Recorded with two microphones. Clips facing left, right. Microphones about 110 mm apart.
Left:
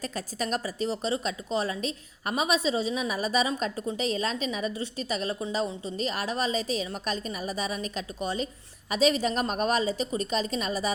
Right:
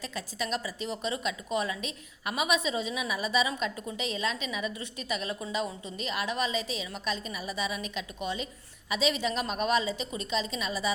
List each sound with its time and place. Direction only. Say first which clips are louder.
0.0 s a woman's voice: left 3 dB; 40° left (ahead or behind)